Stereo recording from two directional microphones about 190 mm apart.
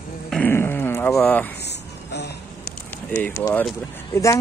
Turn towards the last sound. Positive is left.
turn(degrees=15)  # may be behind; listen again after turning